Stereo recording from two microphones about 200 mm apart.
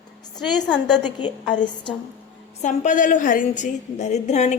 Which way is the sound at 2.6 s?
40° left (ahead or behind).